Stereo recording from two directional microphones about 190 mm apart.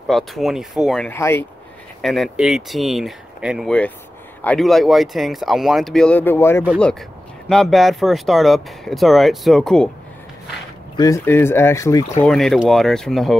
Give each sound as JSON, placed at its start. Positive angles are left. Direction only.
{"t": 0.1, "sound": "speech", "side_deg": 0}
{"t": 1.1, "sound": "speech", "side_deg": 15}
{"t": 2.0, "sound": "speech", "side_deg": 0}
{"t": 11.0, "sound": "speech", "side_deg": 15}
{"t": 12.3, "sound": "speech", "side_deg": 0}